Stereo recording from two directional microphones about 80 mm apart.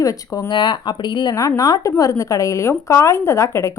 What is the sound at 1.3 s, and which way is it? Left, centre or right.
Speech, left.